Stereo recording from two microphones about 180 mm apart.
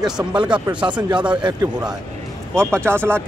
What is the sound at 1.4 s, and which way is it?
Speech, 25° right (ahead or behind).